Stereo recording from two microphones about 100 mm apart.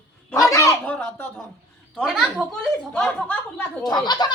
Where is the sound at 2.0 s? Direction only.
Centre (ahead or behind).